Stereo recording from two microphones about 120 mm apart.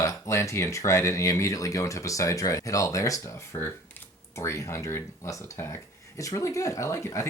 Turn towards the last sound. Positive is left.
turn(degrees=25)  # may be behind; listen again after turning